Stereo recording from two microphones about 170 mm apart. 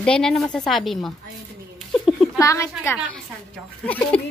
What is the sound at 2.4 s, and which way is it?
Speech, 15° left (ahead or behind).